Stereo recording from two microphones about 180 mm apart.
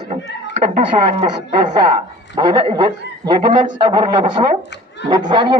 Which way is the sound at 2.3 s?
25° right (ahead or behind).